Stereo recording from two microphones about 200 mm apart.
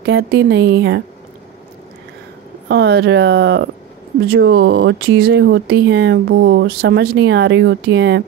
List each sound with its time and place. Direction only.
0.0 s speech: 60° right (ahead or behind)
2.7 s speech: 60° right (ahead or behind)